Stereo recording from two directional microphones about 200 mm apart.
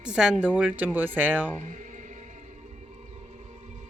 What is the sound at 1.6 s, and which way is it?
Music, 40° right (ahead or behind).